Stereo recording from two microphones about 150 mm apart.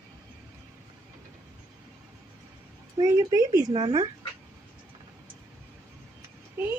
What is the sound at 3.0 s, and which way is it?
A woman's voice, 25° right (ahead or behind).